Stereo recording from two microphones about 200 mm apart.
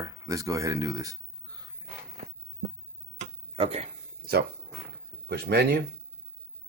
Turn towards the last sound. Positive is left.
turn(degrees=-50)  # may be behind; listen again after turning